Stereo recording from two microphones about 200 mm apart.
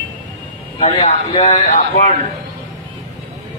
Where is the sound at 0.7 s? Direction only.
30° left (ahead or behind).